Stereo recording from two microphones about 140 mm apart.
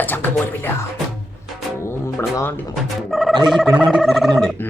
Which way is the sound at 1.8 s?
20° left (ahead or behind).